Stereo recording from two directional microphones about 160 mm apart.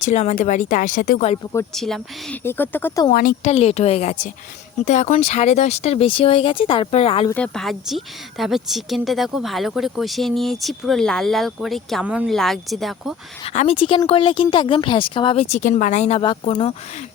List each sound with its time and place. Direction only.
0.0 s speech: 45° left (ahead or behind)
1.7 s speech: centre (ahead or behind)
2.4 s speech: 15° left (ahead or behind)
3.1 s speech: 65° left (ahead or behind)
3.4 s speech: 40° left (ahead or behind)
7.3 s speech: 10° left (ahead or behind)
13.4 s speech: 45° left (ahead or behind)